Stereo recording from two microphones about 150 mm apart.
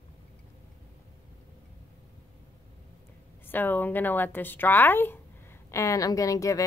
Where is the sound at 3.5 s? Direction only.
15° left (ahead or behind).